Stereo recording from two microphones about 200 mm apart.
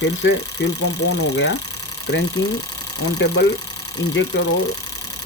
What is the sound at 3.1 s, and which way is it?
Speech, 60° left (ahead or behind).